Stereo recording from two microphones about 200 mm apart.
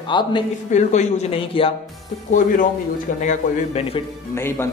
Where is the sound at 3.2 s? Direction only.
35° left (ahead or behind).